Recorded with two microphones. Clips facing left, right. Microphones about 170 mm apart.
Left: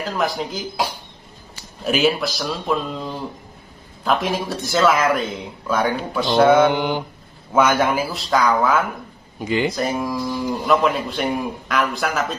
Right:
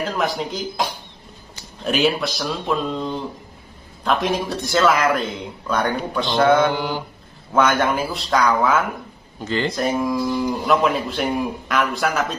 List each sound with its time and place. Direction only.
0.0 s a man's voice: centre (ahead or behind)
6.3 s mantra: 10° left (ahead or behind)
6.7 s mantra: 20° left (ahead or behind)
7.5 s a man's voice: 5° left (ahead or behind)
9.4 s mantra: 10° left (ahead or behind)
9.7 s a man's voice: centre (ahead or behind)